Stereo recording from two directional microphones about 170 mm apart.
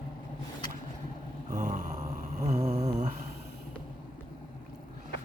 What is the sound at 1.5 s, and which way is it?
Snoring, 45° right (ahead or behind).